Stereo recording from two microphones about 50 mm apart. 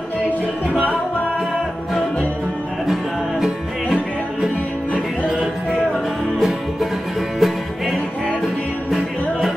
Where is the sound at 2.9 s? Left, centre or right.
Centre.